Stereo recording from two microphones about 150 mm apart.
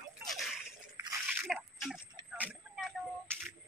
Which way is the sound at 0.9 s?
20° right (ahead or behind).